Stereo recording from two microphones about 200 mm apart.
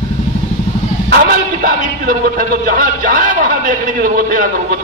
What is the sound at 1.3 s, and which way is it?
A man's voice, 45° right (ahead or behind).